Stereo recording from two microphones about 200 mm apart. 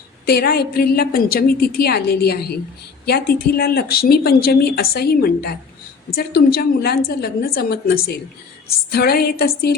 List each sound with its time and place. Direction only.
0.3 s speech: 50° left (ahead or behind)